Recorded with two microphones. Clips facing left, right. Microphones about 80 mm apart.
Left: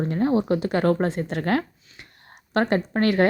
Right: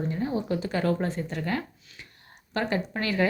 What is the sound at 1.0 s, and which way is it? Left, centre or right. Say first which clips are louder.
Speech: left 6 dB; left.